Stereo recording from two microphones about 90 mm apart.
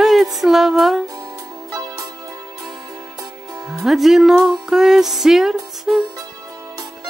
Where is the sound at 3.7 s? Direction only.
Centre (ahead or behind).